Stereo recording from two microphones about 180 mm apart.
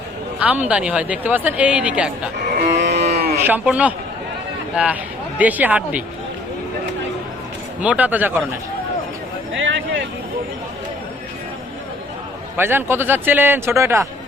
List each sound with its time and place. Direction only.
0.3 s speech: 10° right (ahead or behind)
2.6 s livestock: 70° right (ahead or behind)
3.1 s a sound: 60° right (ahead or behind)
3.4 s speech: 10° right (ahead or behind)
7.8 s speech: 10° right (ahead or behind)
9.6 s a sound: 90° right
12.5 s speech: 10° right (ahead or behind)